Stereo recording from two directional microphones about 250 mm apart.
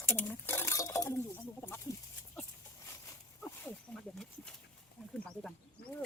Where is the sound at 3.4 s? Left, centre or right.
Centre.